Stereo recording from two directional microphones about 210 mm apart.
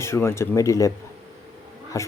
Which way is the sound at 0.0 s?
10° left (ahead or behind).